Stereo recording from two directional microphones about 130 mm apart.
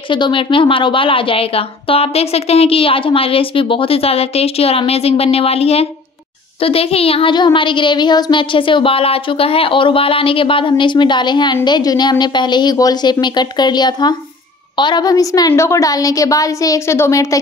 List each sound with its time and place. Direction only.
0.1 s a woman's voice: 40° left (ahead or behind); by 17.4 s 25° left (ahead or behind)